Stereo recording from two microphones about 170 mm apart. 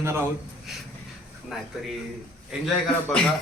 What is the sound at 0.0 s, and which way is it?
Speech, 15° right (ahead or behind).